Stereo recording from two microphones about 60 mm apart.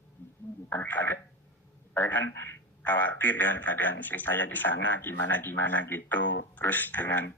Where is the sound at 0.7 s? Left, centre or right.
Left.